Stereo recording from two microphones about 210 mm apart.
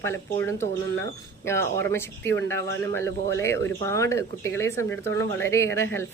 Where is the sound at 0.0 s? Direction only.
15° left (ahead or behind).